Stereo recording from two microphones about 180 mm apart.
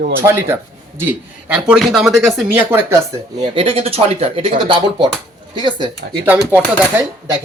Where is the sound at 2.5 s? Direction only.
10° right (ahead or behind).